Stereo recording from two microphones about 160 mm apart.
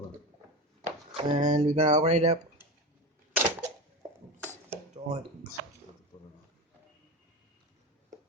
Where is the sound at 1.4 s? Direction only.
50° right (ahead or behind).